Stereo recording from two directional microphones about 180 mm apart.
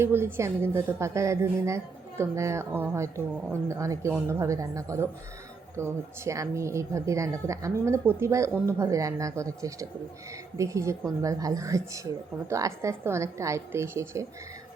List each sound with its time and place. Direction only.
0.0 s speech: 15° right (ahead or behind)